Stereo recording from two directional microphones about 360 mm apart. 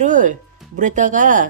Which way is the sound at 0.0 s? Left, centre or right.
Centre.